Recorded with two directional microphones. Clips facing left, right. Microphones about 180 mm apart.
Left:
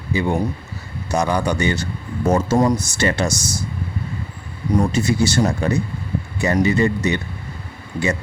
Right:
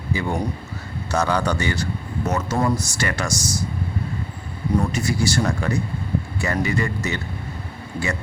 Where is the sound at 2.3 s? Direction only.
30° left (ahead or behind).